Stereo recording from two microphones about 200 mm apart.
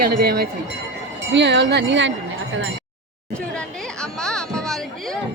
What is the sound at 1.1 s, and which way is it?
Speech, 60° right (ahead or behind).